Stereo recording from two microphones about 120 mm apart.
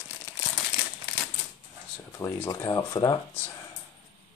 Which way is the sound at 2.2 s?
25° left (ahead or behind).